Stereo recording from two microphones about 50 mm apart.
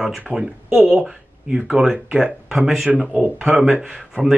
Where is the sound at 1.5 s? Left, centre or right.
Centre.